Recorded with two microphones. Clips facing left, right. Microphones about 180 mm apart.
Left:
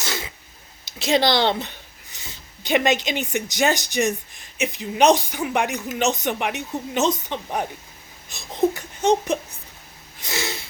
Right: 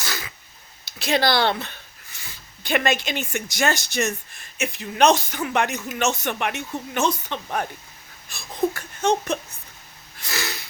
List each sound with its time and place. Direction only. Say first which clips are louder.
0.0 s sneeze: left 3 dB; 25° left (ahead or behind)
0.9 s speech: left 2 dB; 20° left (ahead or behind)
8.3 s a sound: left 3 dB; 20° left (ahead or behind)